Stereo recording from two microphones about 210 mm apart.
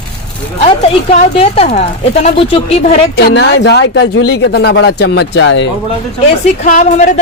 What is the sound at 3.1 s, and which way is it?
Speech, 60° left (ahead or behind).